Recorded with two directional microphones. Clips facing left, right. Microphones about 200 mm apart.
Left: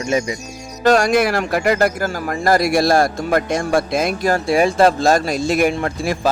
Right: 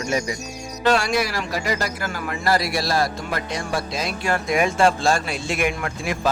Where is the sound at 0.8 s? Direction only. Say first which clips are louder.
Left 6 dB; 45° left (ahead or behind).